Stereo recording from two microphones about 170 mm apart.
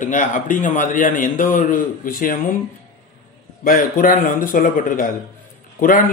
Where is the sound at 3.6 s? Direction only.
55° left (ahead or behind).